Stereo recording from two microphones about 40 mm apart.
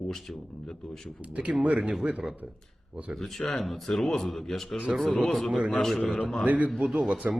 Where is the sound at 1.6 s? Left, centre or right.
Right.